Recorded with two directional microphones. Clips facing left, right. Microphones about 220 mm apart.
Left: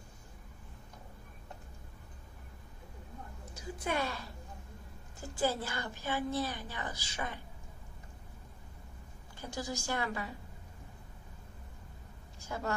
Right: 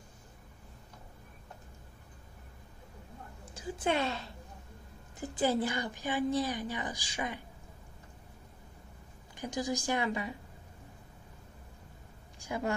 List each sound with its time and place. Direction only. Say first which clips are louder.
3.5 s a woman's voice: right 4 dB; 30° right (ahead or behind)
9.4 s a woman's voice: right 5 dB; 15° right (ahead or behind)
12.4 s a woman's voice: right 3 dB; 15° right (ahead or behind)